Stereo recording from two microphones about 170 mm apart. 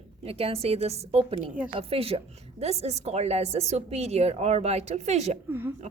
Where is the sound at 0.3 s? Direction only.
35° right (ahead or behind).